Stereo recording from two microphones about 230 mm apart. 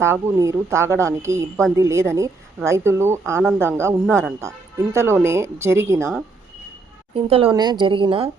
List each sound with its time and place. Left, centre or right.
0.0 s speech: centre
7.3 s a woman's voice: right